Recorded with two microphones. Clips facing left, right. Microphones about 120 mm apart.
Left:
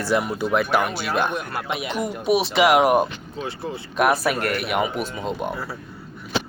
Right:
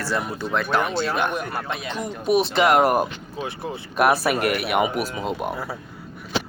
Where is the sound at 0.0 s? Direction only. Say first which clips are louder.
Left 4 dB; 15° left (ahead or behind).